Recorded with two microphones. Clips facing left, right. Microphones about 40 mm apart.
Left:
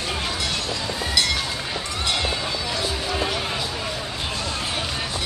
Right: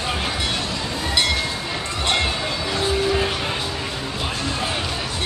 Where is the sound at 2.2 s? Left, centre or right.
Centre.